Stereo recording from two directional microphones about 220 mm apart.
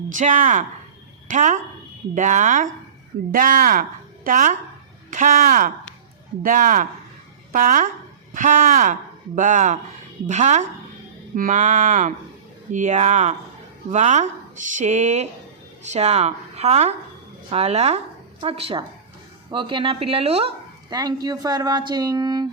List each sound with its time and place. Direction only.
0.1 s a woman's voice: 35° right (ahead or behind); by 22.4 s 20° right (ahead or behind)